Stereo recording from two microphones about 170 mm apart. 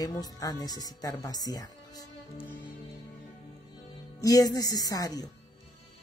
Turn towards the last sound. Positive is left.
turn(degrees=20)  # may be behind; listen again after turning